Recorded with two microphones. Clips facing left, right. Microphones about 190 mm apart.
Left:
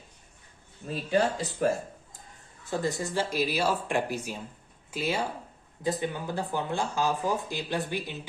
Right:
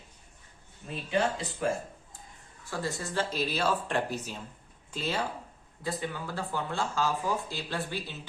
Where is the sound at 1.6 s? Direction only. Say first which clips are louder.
Left 4 dB; 40° left (ahead or behind).